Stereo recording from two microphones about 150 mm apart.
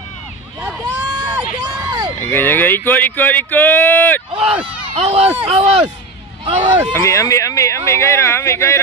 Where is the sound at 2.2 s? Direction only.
15° left (ahead or behind).